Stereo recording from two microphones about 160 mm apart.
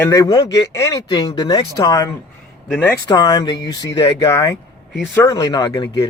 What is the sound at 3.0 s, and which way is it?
Speech, 25° left (ahead or behind).